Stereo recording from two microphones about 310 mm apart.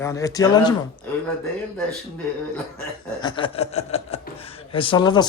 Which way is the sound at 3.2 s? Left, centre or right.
Centre.